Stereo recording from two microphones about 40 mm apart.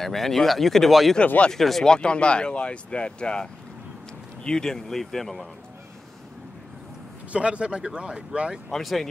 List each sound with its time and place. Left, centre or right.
0.0 s speech: centre
1.2 s speech: left
1.5 s speech: centre
1.9 s speech: left; by 5.5 s centre
7.3 s speech: right
8.7 s speech: centre